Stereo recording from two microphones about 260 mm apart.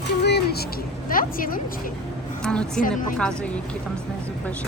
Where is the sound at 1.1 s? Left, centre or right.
Left.